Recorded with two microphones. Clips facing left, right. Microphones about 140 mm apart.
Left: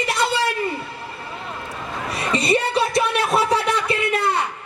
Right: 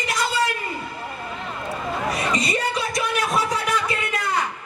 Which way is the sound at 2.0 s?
30° left (ahead or behind).